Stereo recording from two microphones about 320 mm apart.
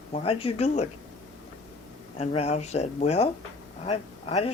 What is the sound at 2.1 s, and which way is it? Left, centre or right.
Speech, centre.